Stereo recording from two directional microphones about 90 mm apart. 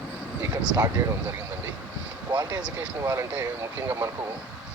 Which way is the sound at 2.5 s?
15° right (ahead or behind).